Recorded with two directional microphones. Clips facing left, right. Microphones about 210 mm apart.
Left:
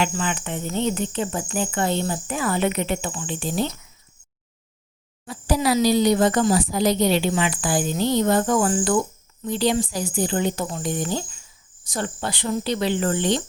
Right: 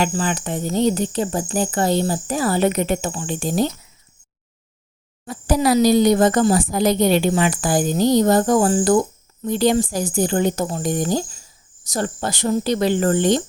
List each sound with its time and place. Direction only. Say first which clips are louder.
0.0 s speech: right 3 dB; 35° right (ahead or behind)
5.2 s speech: right 4 dB; 45° right (ahead or behind)